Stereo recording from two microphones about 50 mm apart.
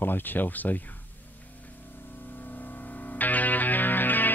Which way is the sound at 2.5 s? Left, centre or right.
Left.